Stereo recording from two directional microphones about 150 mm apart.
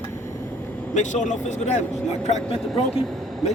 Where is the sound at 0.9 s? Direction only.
55° left (ahead or behind).